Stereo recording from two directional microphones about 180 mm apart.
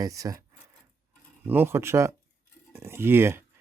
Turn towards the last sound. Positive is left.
turn(degrees=-15)  # may be behind; listen again after turning